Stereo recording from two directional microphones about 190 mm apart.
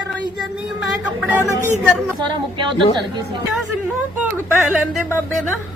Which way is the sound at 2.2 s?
25° right (ahead or behind).